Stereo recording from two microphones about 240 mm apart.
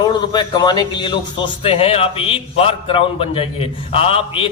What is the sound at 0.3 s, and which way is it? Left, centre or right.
Speech, centre.